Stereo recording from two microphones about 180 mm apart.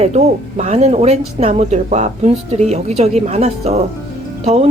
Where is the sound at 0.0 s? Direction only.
40° right (ahead or behind).